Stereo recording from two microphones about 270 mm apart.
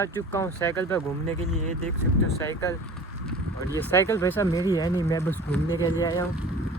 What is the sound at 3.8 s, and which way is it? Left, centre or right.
Speech, centre.